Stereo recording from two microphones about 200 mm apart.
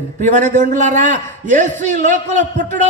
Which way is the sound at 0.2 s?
40° right (ahead or behind).